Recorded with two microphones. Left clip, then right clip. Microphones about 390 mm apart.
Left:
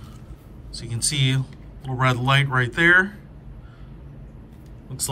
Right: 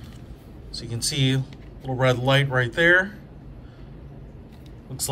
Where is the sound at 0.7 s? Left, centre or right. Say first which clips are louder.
Left 1 dB; centre.